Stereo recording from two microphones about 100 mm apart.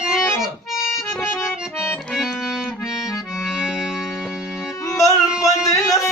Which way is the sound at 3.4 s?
5° right (ahead or behind).